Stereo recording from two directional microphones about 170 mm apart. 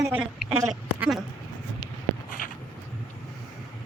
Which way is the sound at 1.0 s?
Centre (ahead or behind).